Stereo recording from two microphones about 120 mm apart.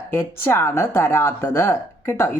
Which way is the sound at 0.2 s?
20° left (ahead or behind).